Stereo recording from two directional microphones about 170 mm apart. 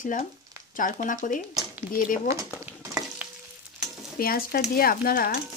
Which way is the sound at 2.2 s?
15° right (ahead or behind).